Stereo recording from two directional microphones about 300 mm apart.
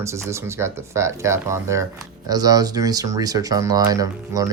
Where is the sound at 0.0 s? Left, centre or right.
Centre.